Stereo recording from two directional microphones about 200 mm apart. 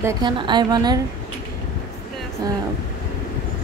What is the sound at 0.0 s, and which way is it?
Speech, 20° right (ahead or behind).